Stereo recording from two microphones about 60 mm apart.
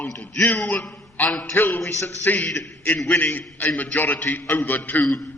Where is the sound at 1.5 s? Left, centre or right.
Left.